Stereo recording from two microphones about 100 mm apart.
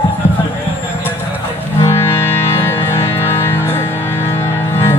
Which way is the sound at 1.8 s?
25° left (ahead or behind).